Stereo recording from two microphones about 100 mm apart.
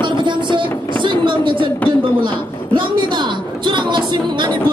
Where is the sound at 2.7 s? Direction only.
50° right (ahead or behind).